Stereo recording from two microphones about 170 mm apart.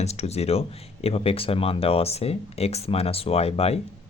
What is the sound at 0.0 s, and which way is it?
Speech, 40° left (ahead or behind).